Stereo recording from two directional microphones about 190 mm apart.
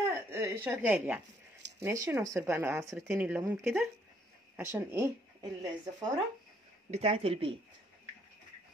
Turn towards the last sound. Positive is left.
turn(degrees=-30)  # may be behind; listen again after turning